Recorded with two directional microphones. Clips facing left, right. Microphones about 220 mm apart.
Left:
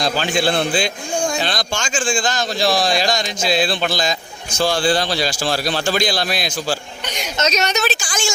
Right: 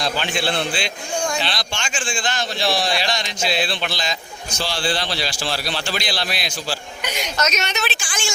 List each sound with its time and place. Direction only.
0.0 s a man's voice: 40° left (ahead or behind)
7.3 s a woman's voice: 30° left (ahead or behind)